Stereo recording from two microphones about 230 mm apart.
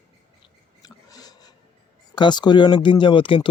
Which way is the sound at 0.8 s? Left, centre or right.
Centre.